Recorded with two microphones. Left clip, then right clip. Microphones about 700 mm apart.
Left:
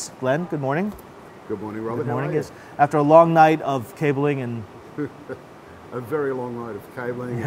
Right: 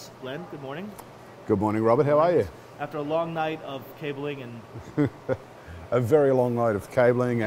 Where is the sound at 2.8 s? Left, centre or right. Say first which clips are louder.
Left 14 dB; left.